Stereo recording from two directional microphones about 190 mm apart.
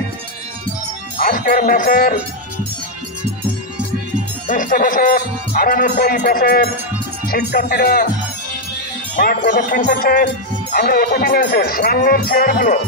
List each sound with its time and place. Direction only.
1.2 s speech: 50° left (ahead or behind)
4.5 s music: 45° left (ahead or behind)
9.1 s music: 50° left (ahead or behind)